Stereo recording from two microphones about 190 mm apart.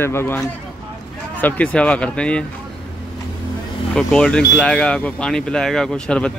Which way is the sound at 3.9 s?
5° left (ahead or behind).